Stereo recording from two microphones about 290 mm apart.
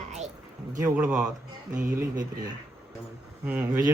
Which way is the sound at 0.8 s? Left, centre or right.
Centre.